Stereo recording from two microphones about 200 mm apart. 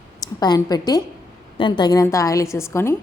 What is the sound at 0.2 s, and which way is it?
A woman's voice, 20° left (ahead or behind).